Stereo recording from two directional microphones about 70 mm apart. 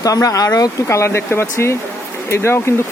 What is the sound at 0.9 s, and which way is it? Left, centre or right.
Speech, left.